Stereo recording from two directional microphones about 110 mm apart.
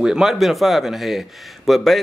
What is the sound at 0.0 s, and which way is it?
A man's voice, 5° right (ahead or behind).